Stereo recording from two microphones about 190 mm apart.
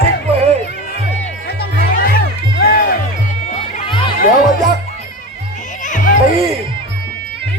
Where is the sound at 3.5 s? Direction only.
35° left (ahead or behind).